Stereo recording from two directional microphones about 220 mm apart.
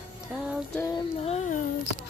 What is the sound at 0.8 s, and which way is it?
Music, 20° left (ahead or behind).